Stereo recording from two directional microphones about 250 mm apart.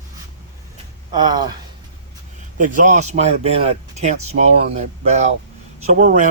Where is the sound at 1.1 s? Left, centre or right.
Centre.